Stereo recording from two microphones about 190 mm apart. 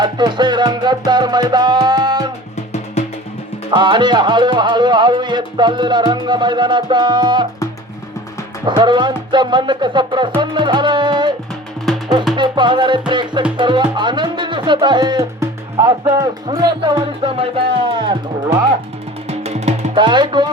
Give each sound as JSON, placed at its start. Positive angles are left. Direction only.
{"t": 0.0, "sound": "music", "side_deg": -25}
{"t": 3.7, "sound": "music", "side_deg": -25}
{"t": 8.6, "sound": "music", "side_deg": -25}
{"t": 11.9, "sound": "music", "side_deg": 0}
{"t": 12.4, "sound": "music", "side_deg": -25}
{"t": 19.3, "sound": "music", "side_deg": -35}
{"t": 19.9, "sound": "music", "side_deg": -25}